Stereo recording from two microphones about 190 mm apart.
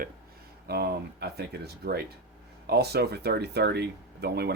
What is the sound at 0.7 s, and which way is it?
Speech, 55° right (ahead or behind).